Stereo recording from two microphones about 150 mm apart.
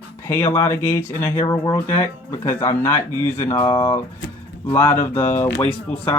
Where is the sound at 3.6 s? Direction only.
35° left (ahead or behind).